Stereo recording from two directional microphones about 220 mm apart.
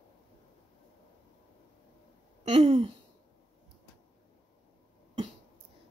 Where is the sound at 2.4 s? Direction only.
30° right (ahead or behind).